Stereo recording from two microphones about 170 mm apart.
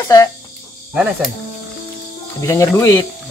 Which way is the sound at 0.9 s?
5° right (ahead or behind).